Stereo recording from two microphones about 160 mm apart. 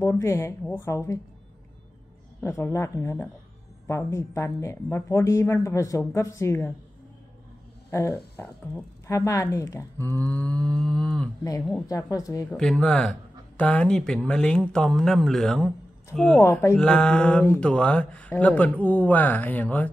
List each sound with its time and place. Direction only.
0.0 s speech: 15° left (ahead or behind)
2.4 s speech: 15° left (ahead or behind)
7.9 s speech: 15° left (ahead or behind)
11.9 s speech: 20° left (ahead or behind)
12.4 s speech: 5° left (ahead or behind)